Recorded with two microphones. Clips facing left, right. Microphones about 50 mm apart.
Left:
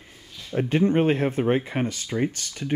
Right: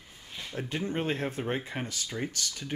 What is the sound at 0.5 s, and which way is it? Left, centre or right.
Speech, left.